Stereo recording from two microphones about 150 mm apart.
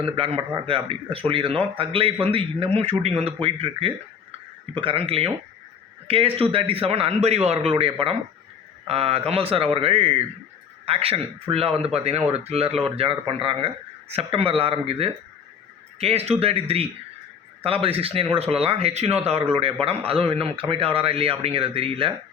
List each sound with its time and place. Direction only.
0.0 s a man's voice: 40° right (ahead or behind)